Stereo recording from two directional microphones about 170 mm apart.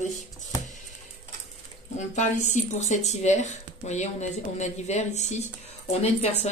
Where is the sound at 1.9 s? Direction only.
45° left (ahead or behind).